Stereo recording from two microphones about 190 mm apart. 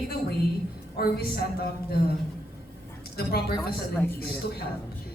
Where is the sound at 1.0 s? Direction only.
55° left (ahead or behind).